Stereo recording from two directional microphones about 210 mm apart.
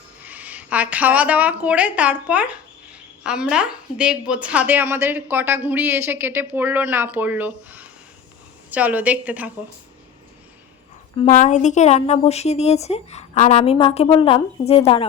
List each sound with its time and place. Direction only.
0.3 s a woman's voice: 5° right (ahead or behind)
11.3 s a woman's voice: 35° left (ahead or behind)